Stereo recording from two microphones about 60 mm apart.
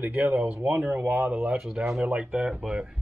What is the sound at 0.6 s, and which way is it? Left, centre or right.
Speech, right.